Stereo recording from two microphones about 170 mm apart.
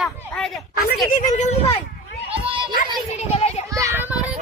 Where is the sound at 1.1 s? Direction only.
50° left (ahead or behind).